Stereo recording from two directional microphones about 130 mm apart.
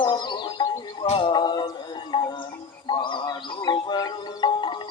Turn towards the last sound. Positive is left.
turn(degrees=35)  # may be behind; listen again after turning